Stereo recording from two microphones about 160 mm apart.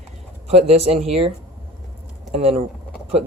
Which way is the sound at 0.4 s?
40° right (ahead or behind).